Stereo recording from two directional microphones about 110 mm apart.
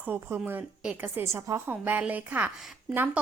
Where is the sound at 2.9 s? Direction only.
15° right (ahead or behind).